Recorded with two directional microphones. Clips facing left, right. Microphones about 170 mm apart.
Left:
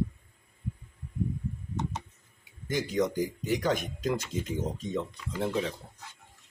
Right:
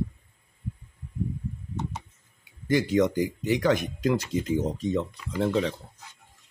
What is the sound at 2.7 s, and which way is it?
Speech, 70° right (ahead or behind).